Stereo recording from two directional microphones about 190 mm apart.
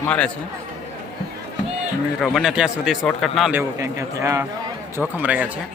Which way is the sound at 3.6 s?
15° right (ahead or behind).